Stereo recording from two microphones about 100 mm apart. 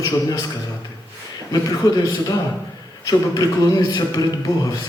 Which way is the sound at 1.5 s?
40° left (ahead or behind).